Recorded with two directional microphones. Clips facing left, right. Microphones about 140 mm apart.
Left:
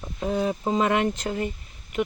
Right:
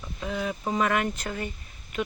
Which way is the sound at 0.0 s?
35° left (ahead or behind).